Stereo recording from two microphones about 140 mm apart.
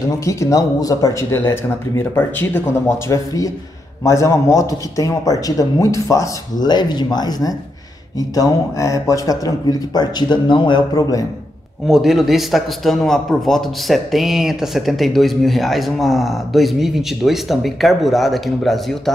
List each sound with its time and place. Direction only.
0.2 s speech: 20° left (ahead or behind)
11.9 s a man's voice: centre (ahead or behind)